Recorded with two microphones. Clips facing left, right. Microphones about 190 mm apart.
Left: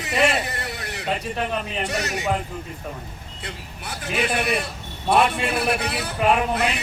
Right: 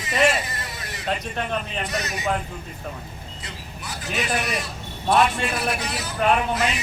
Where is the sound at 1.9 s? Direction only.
70° left (ahead or behind).